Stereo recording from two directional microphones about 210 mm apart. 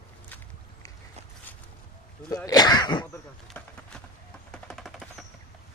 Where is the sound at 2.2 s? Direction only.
15° left (ahead or behind).